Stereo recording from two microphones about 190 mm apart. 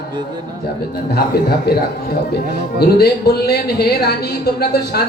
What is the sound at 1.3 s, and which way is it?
Speech, 55° left (ahead or behind).